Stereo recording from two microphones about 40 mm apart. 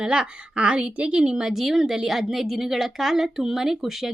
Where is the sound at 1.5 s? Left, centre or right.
Centre.